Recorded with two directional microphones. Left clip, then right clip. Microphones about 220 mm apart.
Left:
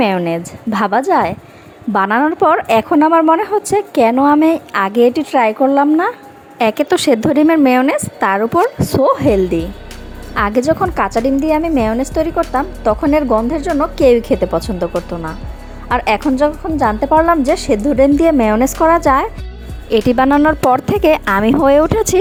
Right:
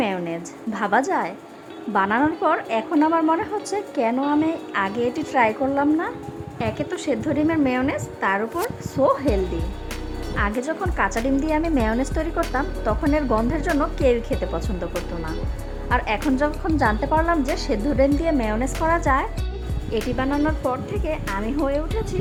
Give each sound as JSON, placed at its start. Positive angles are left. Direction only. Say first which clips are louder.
{"t": 0.0, "sound": "a woman's voice", "louder": "left 10 dB", "side_deg": 30}
{"t": 1.9, "sound": "a woman's voice", "louder": "left 7 dB", "side_deg": 35}
{"t": 15.9, "sound": "a woman's voice", "louder": "left 8 dB", "side_deg": 30}
{"t": 19.9, "sound": "a woman's voice", "louder": "left 13 dB", "side_deg": 45}